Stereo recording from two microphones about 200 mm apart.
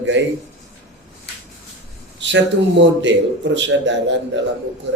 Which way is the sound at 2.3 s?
65° right (ahead or behind).